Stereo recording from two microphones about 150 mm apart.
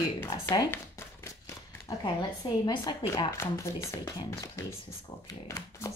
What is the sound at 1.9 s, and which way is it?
Hands, 30° left (ahead or behind).